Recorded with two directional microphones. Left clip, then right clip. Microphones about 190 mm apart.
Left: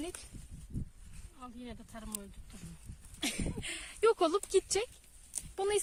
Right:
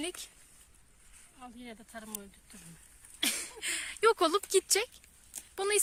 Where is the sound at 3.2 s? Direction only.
5° left (ahead or behind).